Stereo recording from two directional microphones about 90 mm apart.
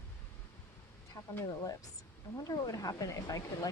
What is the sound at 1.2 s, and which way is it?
Speech, 35° left (ahead or behind).